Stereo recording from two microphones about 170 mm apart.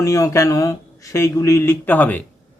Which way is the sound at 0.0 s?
20° left (ahead or behind).